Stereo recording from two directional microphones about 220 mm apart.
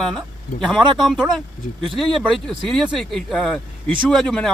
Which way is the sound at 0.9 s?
Centre (ahead or behind).